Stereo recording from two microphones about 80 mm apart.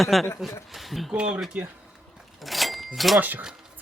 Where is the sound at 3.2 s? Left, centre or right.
Right.